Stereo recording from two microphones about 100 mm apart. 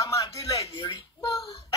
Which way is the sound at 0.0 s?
35° left (ahead or behind).